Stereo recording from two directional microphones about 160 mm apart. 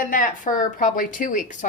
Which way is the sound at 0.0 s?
55° left (ahead or behind).